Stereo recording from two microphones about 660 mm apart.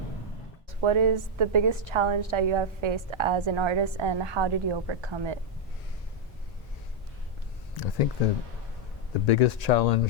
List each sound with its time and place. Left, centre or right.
0.8 s a woman's voice: right
9.2 s speech: left